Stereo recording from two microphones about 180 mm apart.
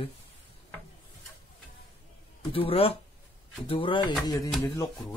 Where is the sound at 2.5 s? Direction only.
30° left (ahead or behind).